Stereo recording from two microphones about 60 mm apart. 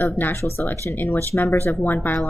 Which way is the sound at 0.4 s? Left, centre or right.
Left.